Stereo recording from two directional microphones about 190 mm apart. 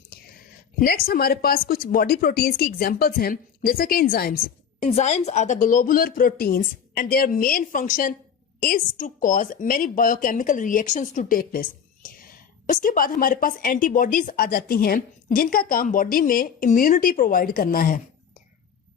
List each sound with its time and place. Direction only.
0.8 s a woman's voice: 50° left (ahead or behind)
4.9 s a woman's voice: 35° left (ahead or behind)